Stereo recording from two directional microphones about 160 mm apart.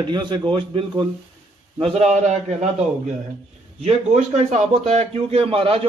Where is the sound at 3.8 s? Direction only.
40° right (ahead or behind).